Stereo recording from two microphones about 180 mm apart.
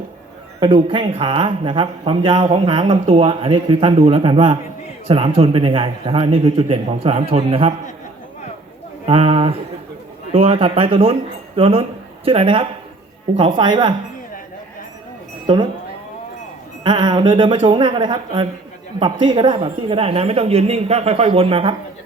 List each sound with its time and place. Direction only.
0.6 s speech: 25° right (ahead or behind)
9.0 s speech: 35° right (ahead or behind)
15.5 s speech: 30° right (ahead or behind)
16.8 s speech: 25° right (ahead or behind)